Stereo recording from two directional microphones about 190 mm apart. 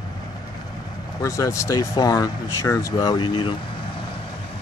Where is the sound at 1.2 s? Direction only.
15° left (ahead or behind).